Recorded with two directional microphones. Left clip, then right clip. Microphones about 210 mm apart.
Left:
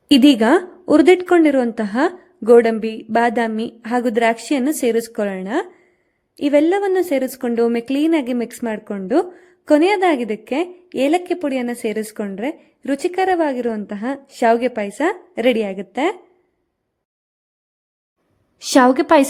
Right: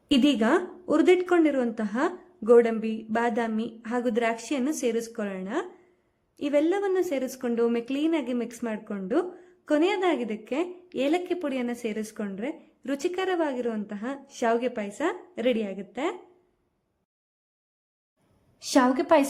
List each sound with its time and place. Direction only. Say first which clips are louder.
0.1 s a woman's voice: left 10 dB; 30° left (ahead or behind)
18.6 s a woman's voice: left 10 dB; 40° left (ahead or behind)